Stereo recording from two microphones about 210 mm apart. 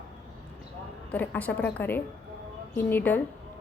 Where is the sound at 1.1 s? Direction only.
5° left (ahead or behind).